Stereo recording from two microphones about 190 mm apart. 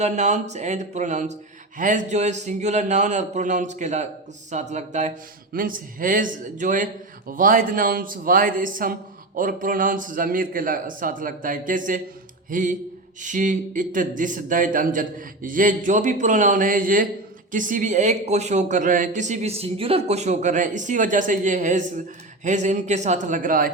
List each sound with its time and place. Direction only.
0.0 s speech: 35° right (ahead or behind)